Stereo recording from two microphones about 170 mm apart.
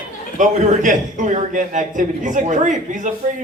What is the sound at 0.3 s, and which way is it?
A man's voice, 45° right (ahead or behind).